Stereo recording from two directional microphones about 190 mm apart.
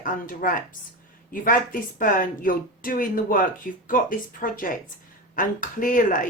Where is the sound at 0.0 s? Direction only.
45° left (ahead or behind).